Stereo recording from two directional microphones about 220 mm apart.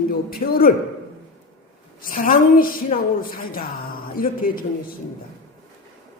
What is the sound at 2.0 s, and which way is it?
A woman's voice, 40° left (ahead or behind).